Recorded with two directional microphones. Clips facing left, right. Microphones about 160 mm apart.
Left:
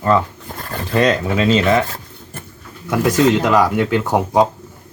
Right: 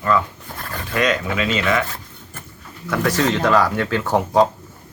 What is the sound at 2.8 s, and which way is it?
Speech, 15° left (ahead or behind).